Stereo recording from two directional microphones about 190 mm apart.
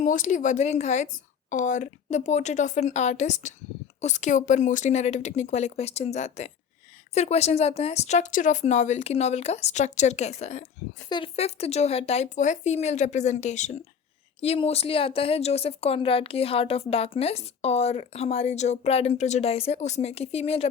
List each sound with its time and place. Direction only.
0.0 s speech: 40° left (ahead or behind)